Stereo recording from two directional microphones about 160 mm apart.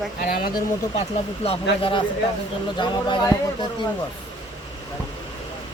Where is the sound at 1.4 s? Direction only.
35° left (ahead or behind).